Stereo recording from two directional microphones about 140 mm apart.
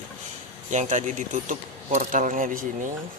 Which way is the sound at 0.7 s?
60° right (ahead or behind).